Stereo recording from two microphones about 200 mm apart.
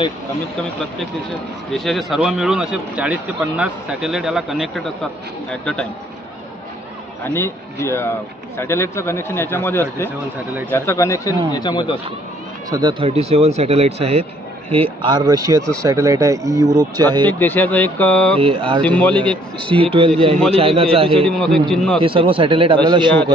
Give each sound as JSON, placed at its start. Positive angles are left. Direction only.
{"t": 1.7, "sound": "speech", "side_deg": 0}
{"t": 7.2, "sound": "speech", "side_deg": 15}
{"t": 10.0, "sound": "speech", "side_deg": -10}
{"t": 10.7, "sound": "speech", "side_deg": 15}
{"t": 12.6, "sound": "speech", "side_deg": -15}
{"t": 13.0, "sound": "speech", "side_deg": -30}
{"t": 17.3, "sound": "speech", "side_deg": 10}
{"t": 18.4, "sound": "speech", "side_deg": -25}
{"t": 18.8, "sound": "speech", "side_deg": 5}
{"t": 20.2, "sound": "speech", "side_deg": -30}
{"t": 21.1, "sound": "speech", "side_deg": 5}
{"t": 22.0, "sound": "speech", "side_deg": -25}